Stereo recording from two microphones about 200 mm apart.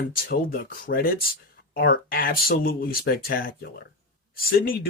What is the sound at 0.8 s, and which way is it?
Speech, 45° left (ahead or behind).